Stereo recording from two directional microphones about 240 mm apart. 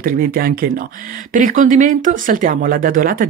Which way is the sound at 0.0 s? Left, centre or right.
Right.